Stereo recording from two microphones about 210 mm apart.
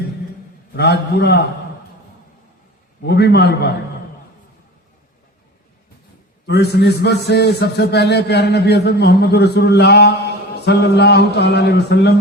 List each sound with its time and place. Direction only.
0.8 s a man's voice: 50° left (ahead or behind)
3.1 s a man's voice: 50° left (ahead or behind)
6.4 s a man's voice: 50° left (ahead or behind)